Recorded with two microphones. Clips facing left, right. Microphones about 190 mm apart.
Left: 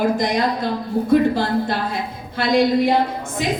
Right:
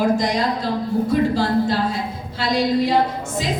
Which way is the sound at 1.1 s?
55° left (ahead or behind).